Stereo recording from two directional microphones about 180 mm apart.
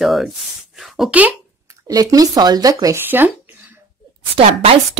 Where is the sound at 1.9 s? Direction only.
20° right (ahead or behind).